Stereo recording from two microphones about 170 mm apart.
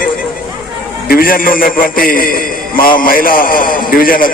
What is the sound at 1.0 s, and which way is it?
A man's voice, 60° left (ahead or behind).